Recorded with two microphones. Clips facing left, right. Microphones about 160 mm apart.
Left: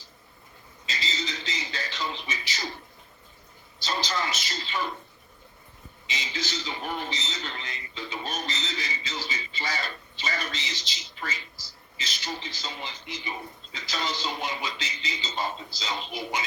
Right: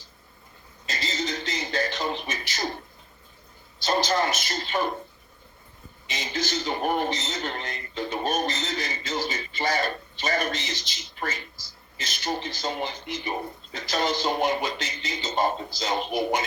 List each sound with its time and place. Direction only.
0.9 s a sound: 50° right (ahead or behind)
3.8 s a man's voice: 50° right (ahead or behind)
6.1 s a man's voice: 50° right (ahead or behind)